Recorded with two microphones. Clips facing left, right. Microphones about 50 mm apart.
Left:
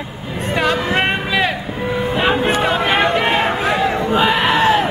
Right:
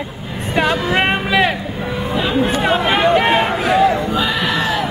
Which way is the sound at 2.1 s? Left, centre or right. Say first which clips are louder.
Even; left.